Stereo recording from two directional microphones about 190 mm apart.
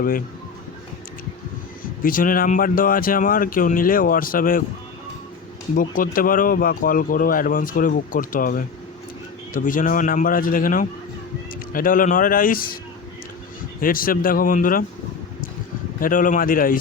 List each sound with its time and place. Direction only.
1.8 s speech: 45° left (ahead or behind)
5.7 s speech: 45° left (ahead or behind)
13.8 s speech: 50° left (ahead or behind)
16.0 s speech: 45° left (ahead or behind)